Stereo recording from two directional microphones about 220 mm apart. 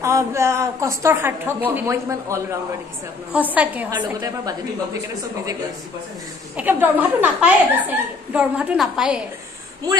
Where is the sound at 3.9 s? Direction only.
20° right (ahead or behind).